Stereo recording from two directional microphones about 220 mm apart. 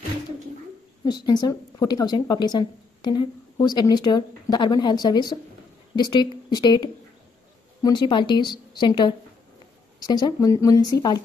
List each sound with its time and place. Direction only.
1.0 s speech: 20° left (ahead or behind)